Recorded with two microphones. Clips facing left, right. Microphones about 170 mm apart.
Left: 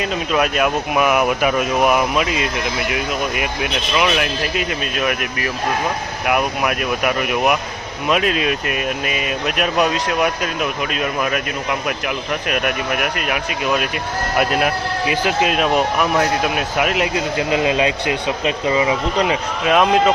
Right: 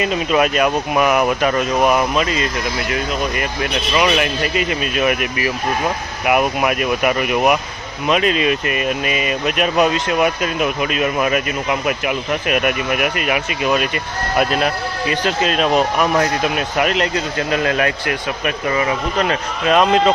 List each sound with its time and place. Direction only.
0.0 s speech: centre (ahead or behind); by 19.7 s 15° left (ahead or behind)
19.7 s speech: 5° left (ahead or behind)